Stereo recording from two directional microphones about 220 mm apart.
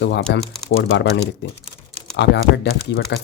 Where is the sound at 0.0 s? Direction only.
50° left (ahead or behind).